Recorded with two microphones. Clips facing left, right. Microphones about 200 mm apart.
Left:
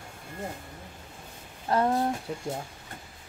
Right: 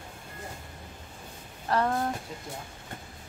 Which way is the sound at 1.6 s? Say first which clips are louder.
Left 2 dB; 20° left (ahead or behind).